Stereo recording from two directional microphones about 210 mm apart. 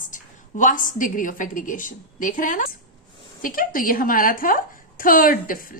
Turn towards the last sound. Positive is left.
turn(degrees=40)  # may be behind; listen again after turning